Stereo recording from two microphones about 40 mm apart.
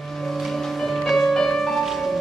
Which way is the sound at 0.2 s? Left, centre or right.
Centre.